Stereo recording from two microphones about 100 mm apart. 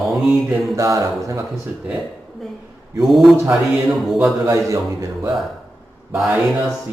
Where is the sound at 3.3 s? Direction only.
30° right (ahead or behind).